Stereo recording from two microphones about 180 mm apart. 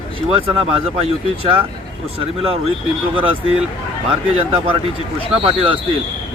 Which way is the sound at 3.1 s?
30° right (ahead or behind).